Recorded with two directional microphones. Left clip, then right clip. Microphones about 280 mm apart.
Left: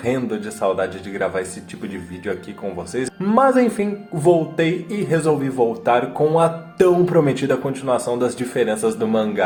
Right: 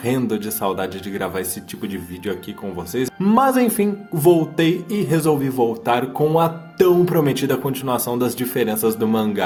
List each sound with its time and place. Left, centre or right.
0.0 s speech: right
3.0 s speech: right